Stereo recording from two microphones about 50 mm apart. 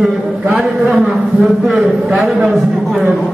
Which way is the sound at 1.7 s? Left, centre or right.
Centre.